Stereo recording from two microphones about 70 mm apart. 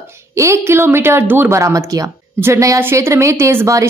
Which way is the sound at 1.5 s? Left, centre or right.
Right.